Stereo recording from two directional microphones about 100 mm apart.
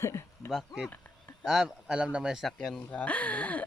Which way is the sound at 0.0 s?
25° left (ahead or behind).